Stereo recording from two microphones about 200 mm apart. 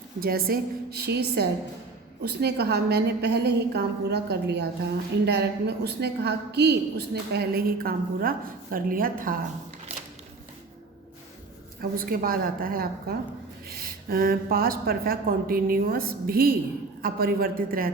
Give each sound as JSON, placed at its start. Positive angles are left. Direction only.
{"t": 0.2, "sound": "a woman's voice", "side_deg": -50}
{"t": 11.8, "sound": "speech", "side_deg": -45}